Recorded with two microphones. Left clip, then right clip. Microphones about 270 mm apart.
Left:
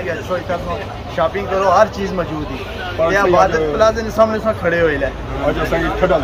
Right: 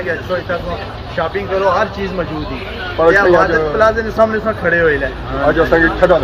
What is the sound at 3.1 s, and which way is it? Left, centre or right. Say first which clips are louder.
A man's voice: right 3 dB; centre.